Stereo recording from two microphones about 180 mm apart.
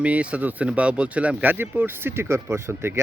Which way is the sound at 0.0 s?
5° right (ahead or behind).